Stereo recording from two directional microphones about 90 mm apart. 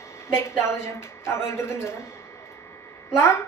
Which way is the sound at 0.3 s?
30° left (ahead or behind).